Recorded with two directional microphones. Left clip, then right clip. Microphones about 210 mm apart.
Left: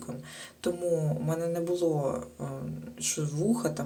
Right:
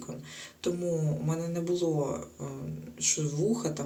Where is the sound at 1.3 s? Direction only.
25° left (ahead or behind).